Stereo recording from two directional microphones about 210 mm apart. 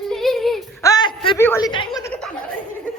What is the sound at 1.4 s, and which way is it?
Speech, 10° left (ahead or behind).